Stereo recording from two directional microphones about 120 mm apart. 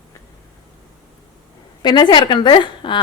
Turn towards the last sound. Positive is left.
turn(degrees=40)  # may be behind; listen again after turning